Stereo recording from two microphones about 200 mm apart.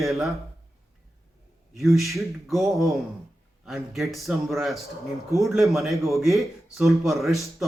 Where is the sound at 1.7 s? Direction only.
Centre (ahead or behind).